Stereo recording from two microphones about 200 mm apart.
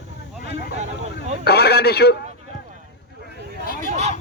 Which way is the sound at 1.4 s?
55° left (ahead or behind).